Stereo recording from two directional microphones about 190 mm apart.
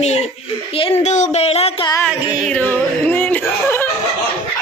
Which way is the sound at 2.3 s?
5° left (ahead or behind).